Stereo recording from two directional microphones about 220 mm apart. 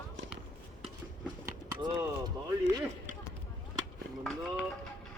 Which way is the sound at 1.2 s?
15° right (ahead or behind).